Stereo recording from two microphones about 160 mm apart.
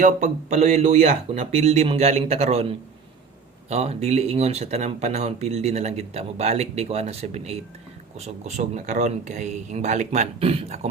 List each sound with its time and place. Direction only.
0.0 s speech: 50° right (ahead or behind)